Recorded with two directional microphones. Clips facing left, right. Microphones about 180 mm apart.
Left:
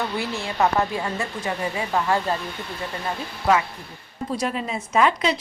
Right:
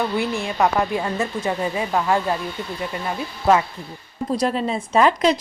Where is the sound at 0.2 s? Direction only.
15° right (ahead or behind).